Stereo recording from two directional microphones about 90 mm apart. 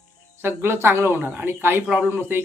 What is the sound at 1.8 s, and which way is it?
Speech, 10° right (ahead or behind).